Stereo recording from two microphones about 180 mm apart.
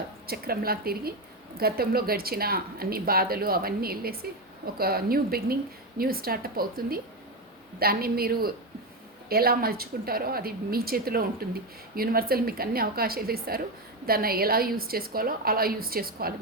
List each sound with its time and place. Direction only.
0.3 s speech: 55° right (ahead or behind)